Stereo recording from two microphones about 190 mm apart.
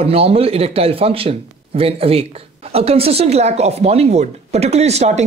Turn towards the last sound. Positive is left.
turn(degrees=-35)  # may be behind; listen again after turning